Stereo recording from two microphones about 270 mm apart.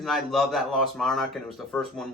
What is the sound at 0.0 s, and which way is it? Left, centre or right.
Speech, centre.